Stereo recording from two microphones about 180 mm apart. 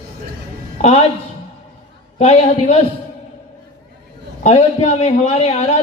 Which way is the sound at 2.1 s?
35° left (ahead or behind).